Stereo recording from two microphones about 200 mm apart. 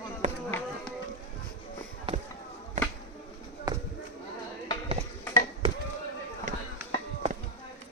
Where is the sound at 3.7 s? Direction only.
20° right (ahead or behind).